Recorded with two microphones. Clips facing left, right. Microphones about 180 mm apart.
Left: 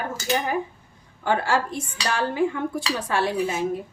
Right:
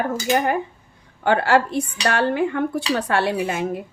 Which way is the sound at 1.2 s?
65° right (ahead or behind).